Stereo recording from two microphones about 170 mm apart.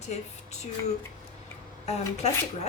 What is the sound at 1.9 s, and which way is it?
Speech, 40° left (ahead or behind).